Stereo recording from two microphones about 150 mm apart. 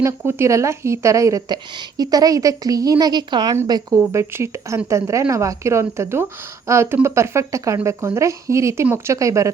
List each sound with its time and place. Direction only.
0.0 s a woman's voice: 20° right (ahead or behind)